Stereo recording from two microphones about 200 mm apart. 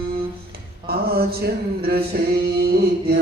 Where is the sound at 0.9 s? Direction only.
50° right (ahead or behind).